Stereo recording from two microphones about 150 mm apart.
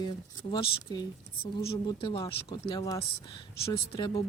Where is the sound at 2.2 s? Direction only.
20° left (ahead or behind).